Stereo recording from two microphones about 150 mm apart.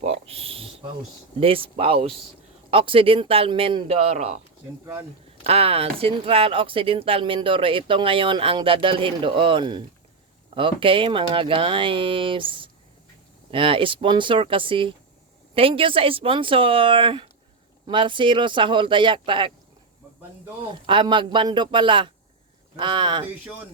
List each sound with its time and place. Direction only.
0.0 s a sound: 45° right (ahead or behind)
1.4 s speech: 40° right (ahead or behind)
5.4 s speech: 40° right (ahead or behind)
20.8 s speech: 35° right (ahead or behind)